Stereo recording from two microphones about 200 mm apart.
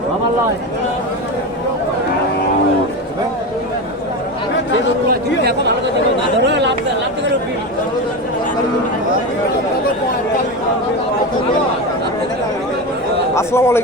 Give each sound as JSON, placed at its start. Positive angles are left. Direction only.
{"t": 5.4, "sound": "speech", "side_deg": -55}
{"t": 13.3, "sound": "speech", "side_deg": 15}